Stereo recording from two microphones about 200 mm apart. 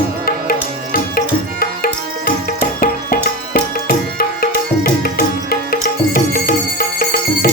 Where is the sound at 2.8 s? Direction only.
45° left (ahead or behind).